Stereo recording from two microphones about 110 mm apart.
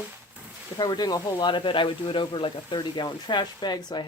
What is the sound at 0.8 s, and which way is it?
Speech, 40° left (ahead or behind).